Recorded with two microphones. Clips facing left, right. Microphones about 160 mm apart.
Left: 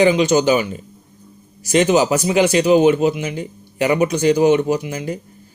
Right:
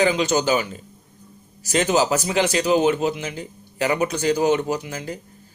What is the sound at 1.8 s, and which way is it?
Speech, 15° left (ahead or behind).